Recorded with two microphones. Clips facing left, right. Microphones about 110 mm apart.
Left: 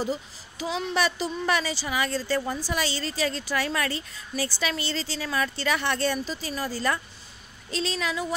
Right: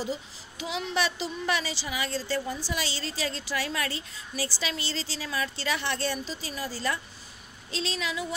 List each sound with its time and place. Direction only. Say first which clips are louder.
0.6 s a woman's voice: left 3 dB; 40° left (ahead or behind)